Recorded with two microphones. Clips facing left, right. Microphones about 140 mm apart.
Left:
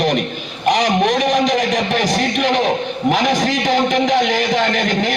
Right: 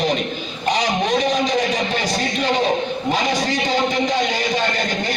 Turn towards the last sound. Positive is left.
turn(degrees=90)